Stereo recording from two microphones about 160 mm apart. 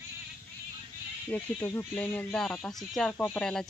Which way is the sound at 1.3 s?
10° left (ahead or behind).